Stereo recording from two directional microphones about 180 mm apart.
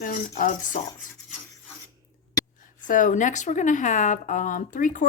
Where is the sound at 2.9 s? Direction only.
45° left (ahead or behind).